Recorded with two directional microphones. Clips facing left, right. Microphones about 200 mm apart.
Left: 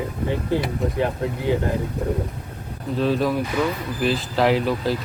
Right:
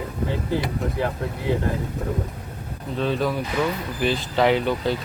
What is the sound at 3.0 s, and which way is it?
Speech, centre (ahead or behind).